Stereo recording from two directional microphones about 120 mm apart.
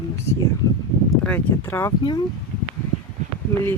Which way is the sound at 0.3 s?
25° left (ahead or behind).